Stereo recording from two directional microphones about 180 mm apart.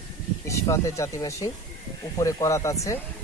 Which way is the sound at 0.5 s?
15° left (ahead or behind).